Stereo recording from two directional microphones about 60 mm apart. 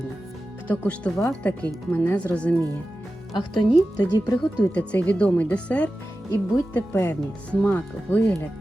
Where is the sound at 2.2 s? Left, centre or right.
Centre.